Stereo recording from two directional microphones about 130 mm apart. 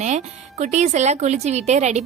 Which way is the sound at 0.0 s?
65° right (ahead or behind).